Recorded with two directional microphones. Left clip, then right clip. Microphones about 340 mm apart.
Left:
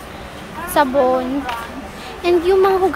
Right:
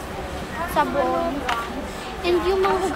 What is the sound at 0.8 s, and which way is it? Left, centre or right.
Speech, centre.